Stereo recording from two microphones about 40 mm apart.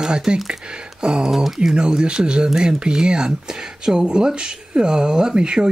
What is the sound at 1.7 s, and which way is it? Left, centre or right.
Speech, right.